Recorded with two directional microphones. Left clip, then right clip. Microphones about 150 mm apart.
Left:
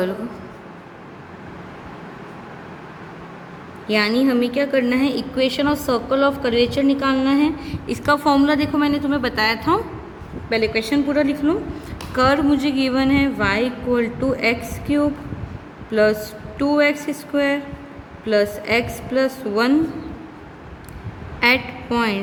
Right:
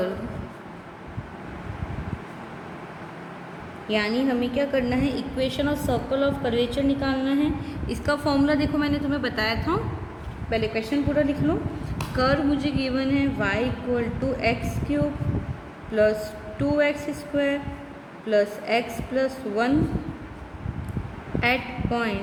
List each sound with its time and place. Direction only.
3.8 s a woman's voice: 55° left (ahead or behind)
10.5 s a woman's voice: 60° left (ahead or behind)
21.9 s a woman's voice: 55° left (ahead or behind)